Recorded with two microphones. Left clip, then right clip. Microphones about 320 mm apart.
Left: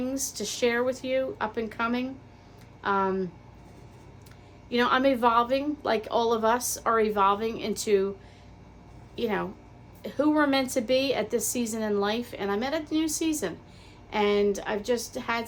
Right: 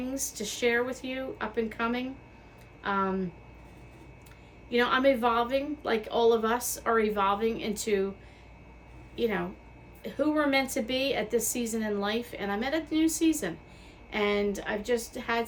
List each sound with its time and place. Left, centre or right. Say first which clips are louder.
0.0 s a woman's voice: left 3 dB; centre
4.7 s a woman's voice: left 1 dB; centre
9.1 s a woman's voice: left 1 dB; centre